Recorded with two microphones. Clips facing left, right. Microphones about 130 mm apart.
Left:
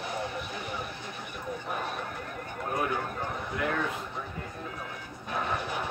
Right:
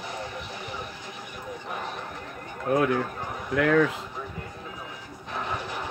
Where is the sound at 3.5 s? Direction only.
90° right.